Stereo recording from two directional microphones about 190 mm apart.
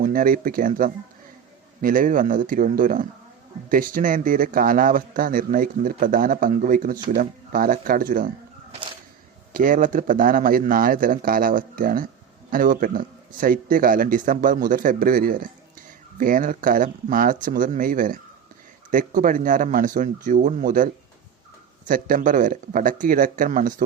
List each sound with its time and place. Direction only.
0.0 s a man's voice: 50° right (ahead or behind)
9.5 s a man's voice: 45° right (ahead or behind)